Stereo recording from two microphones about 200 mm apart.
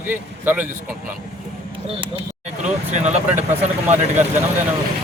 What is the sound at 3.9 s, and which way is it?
Speech, 10° right (ahead or behind).